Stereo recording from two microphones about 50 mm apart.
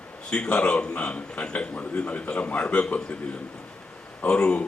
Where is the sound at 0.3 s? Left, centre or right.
Left.